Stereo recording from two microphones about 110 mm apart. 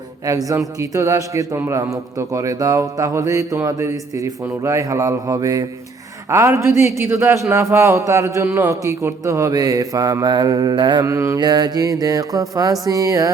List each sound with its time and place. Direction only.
0.3 s a man's voice: 30° right (ahead or behind)
11.0 s a man's voice: 25° right (ahead or behind)
11.3 s speech: 40° right (ahead or behind)